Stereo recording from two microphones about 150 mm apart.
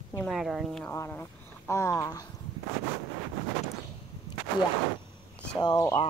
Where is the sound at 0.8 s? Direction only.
15° left (ahead or behind).